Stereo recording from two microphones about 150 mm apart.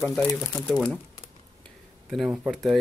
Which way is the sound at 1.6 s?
Centre (ahead or behind).